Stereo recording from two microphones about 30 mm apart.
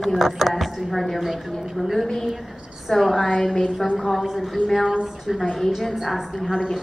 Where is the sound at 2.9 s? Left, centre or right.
Left.